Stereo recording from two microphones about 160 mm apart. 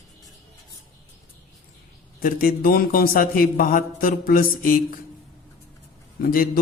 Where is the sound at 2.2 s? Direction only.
65° left (ahead or behind).